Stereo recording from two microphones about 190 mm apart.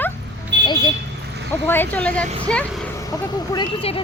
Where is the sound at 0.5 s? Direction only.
65° right (ahead or behind).